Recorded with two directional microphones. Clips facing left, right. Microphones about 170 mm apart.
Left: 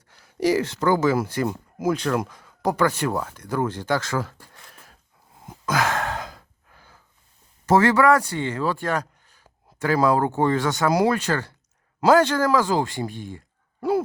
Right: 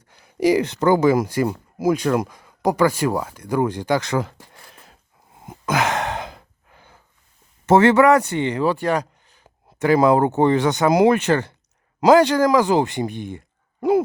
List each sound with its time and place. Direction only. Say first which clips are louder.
0.1 s speech: right 4 dB; 15° right (ahead or behind)
5.5 s sigh: right 2 dB; 20° right (ahead or behind)
7.7 s speech: right 4 dB; 25° right (ahead or behind)